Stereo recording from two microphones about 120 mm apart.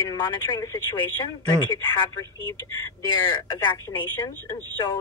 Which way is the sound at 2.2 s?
25° left (ahead or behind).